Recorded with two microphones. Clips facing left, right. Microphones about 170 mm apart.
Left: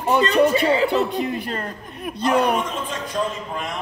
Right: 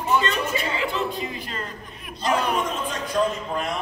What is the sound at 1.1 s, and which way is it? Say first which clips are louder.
A woman's voice: left 6 dB; 60° left (ahead or behind).